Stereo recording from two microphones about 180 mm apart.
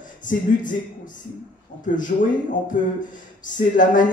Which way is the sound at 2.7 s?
45° left (ahead or behind).